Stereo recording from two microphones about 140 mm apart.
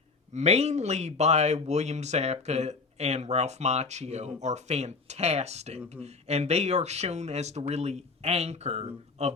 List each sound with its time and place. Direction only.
0.3 s speech: 50° right (ahead or behind)